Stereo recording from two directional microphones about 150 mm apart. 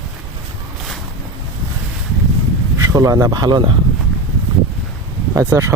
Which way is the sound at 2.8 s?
20° right (ahead or behind).